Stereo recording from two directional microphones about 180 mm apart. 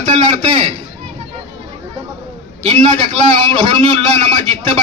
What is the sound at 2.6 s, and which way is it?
A man's voice, 35° right (ahead or behind).